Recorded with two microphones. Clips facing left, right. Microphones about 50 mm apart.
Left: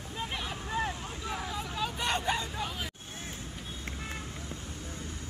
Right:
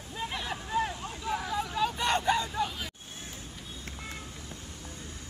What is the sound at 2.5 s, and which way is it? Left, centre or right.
Hubbub, centre.